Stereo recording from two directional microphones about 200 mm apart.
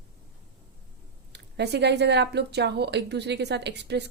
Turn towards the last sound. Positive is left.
turn(degrees=-60)  # may be behind; listen again after turning